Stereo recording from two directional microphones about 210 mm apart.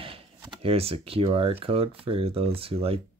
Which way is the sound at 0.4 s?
25° right (ahead or behind).